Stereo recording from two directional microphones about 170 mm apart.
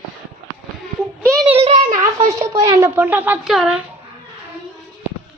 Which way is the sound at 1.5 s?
40° right (ahead or behind).